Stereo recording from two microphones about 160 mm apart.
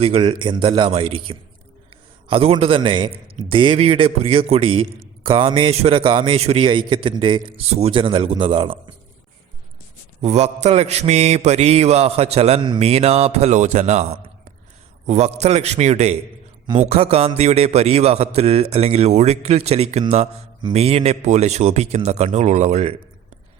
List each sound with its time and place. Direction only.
0.0 s a man's voice: 40° right (ahead or behind)
10.2 s a man's voice: 40° right (ahead or behind)